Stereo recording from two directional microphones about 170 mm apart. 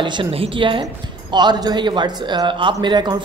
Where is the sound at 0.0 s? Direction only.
30° right (ahead or behind).